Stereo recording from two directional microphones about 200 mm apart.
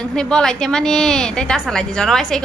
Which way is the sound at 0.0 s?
5° left (ahead or behind).